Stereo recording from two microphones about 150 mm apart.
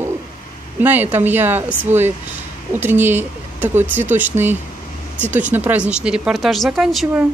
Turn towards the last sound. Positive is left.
turn(degrees=0)  # may be behind; listen again after turning